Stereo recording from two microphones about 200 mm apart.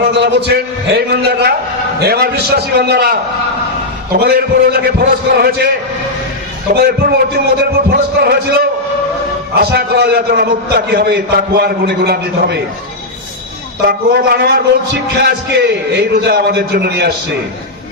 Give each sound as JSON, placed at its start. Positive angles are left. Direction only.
{"t": 0.0, "sound": "a man's voice", "side_deg": -55}
{"t": 6.7, "sound": "a man's voice", "side_deg": -50}
{"t": 13.8, "sound": "a man's voice", "side_deg": -50}